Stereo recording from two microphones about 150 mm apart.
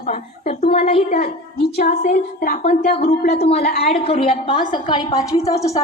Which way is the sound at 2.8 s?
90° left.